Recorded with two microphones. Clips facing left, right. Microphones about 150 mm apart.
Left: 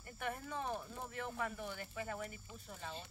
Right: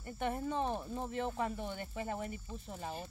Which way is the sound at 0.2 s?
25° right (ahead or behind).